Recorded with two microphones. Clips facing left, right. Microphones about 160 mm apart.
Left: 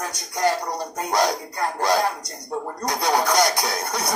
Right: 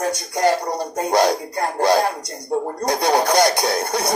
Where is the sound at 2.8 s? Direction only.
30° right (ahead or behind).